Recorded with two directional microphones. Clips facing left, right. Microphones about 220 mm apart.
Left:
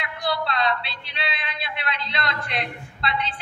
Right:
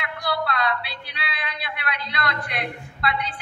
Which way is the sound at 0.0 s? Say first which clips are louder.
Even; 25° left (ahead or behind).